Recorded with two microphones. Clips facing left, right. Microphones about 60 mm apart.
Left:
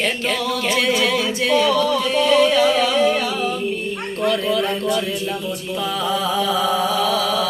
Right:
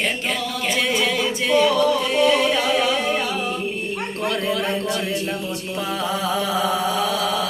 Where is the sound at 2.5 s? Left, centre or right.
Right.